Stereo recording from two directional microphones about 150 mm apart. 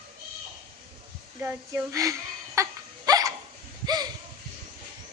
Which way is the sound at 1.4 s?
15° right (ahead or behind).